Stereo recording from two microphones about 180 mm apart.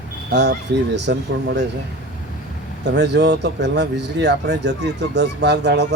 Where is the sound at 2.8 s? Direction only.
70° right (ahead or behind).